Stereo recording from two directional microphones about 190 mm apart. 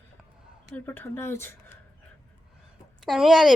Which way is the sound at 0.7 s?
10° left (ahead or behind).